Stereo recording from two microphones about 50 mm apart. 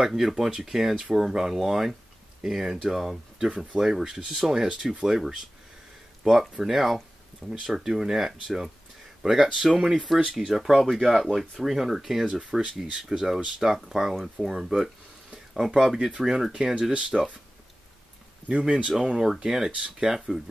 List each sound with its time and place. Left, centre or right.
0.0 s speech: centre
6.6 s speech: centre
12.4 s speech: centre
18.5 s speech: right
18.9 s speech: centre
20.2 s speech: centre